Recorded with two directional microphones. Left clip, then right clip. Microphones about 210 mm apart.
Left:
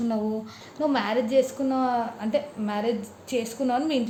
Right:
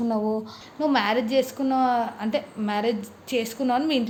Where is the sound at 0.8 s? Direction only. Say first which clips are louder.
Right 2 dB; 20° right (ahead or behind).